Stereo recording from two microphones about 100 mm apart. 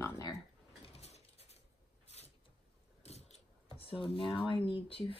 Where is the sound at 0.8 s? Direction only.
90° left.